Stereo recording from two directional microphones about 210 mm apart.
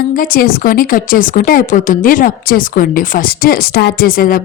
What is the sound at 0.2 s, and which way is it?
A woman's voice, 40° left (ahead or behind).